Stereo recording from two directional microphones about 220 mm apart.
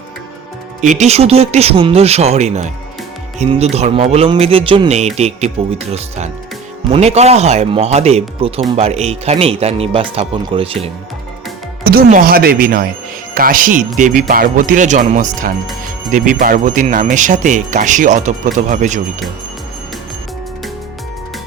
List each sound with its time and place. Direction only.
0.8 s speech: 30° right (ahead or behind)
11.8 s speech: 40° right (ahead or behind)